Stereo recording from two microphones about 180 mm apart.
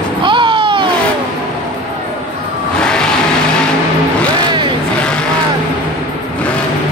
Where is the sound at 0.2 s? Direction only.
25° right (ahead or behind).